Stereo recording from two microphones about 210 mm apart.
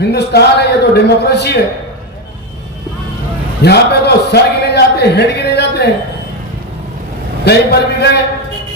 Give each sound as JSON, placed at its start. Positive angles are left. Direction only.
{"t": 0.1, "sound": "a man's voice", "side_deg": 50}
{"t": 3.6, "sound": "a man's voice", "side_deg": 50}
{"t": 7.4, "sound": "a man's voice", "side_deg": 50}